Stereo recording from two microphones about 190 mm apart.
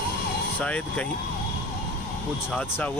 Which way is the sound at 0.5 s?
5° left (ahead or behind).